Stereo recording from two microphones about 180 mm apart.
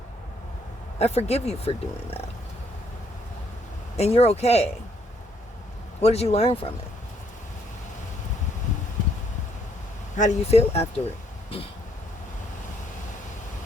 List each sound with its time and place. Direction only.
0.9 s speech: 35° left (ahead or behind)
3.9 s speech: 35° left (ahead or behind)
6.0 s speech: 35° left (ahead or behind)
10.2 s speech: 40° left (ahead or behind)